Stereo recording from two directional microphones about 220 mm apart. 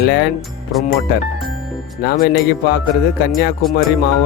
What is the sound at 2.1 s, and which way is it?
Speech, 45° left (ahead or behind).